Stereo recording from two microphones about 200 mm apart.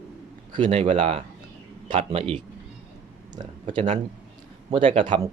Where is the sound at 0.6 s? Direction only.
35° right (ahead or behind).